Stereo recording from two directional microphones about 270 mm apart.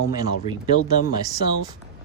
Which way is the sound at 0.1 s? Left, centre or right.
Centre.